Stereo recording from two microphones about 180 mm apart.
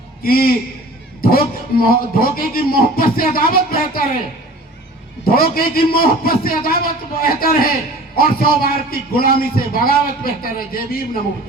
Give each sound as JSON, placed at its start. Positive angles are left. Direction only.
{"t": 0.2, "sound": "a man's voice", "side_deg": 55}
{"t": 5.2, "sound": "a man's voice", "side_deg": 55}